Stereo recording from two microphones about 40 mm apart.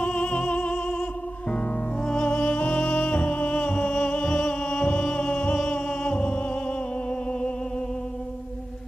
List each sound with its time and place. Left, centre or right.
0.0 s music: left
2.2 s music: left